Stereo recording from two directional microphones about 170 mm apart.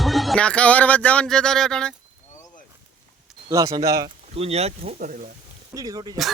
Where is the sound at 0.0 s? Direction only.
Centre (ahead or behind).